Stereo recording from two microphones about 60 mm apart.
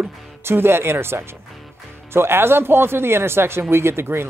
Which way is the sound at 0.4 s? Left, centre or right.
Right.